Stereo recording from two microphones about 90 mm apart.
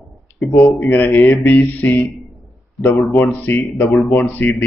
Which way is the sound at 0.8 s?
20° left (ahead or behind).